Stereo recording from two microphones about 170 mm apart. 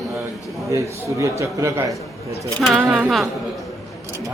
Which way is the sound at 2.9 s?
Centre (ahead or behind).